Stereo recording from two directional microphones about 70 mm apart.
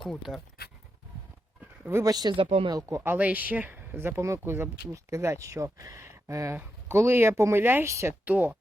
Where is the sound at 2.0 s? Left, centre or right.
Right.